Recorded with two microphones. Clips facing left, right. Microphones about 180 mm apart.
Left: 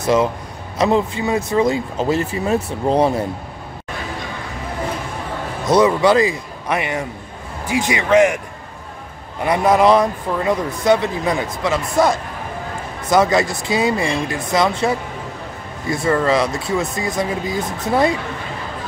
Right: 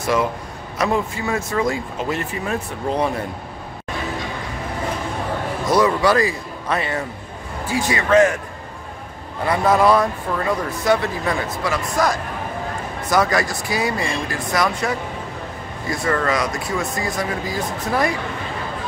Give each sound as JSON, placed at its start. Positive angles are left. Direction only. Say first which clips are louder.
{"t": 0.0, "sound": "a man's voice", "louder": "left 4 dB", "side_deg": 20}
{"t": 2.0, "sound": "speech", "louder": "left 5 dB", "side_deg": 30}
{"t": 5.7, "sound": "a man's voice", "louder": "left 3 dB", "side_deg": 20}
{"t": 9.4, "sound": "speech", "louder": "left 2 dB", "side_deg": 20}